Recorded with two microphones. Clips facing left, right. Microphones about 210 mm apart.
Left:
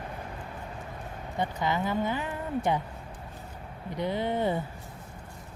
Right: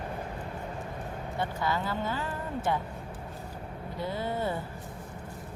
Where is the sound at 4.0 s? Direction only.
20° left (ahead or behind).